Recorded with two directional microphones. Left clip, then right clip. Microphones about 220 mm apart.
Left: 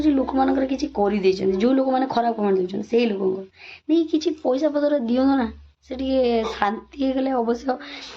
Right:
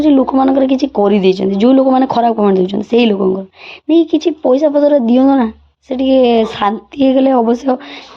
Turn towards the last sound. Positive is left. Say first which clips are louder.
# right 10 dB
turn(degrees=-30)  # may be behind; listen again after turning